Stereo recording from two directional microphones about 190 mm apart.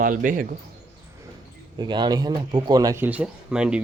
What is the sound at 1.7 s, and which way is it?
Speech, 25° right (ahead or behind).